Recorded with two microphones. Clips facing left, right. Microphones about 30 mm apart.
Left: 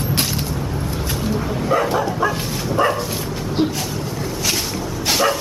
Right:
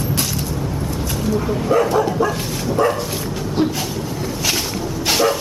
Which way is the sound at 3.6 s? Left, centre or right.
Left.